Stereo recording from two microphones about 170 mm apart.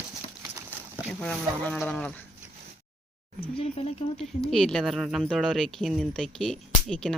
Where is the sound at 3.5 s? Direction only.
35° left (ahead or behind).